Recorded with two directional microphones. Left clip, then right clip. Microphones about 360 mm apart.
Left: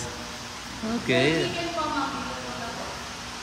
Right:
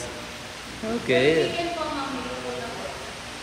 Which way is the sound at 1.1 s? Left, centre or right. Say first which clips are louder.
Right 3 dB; centre.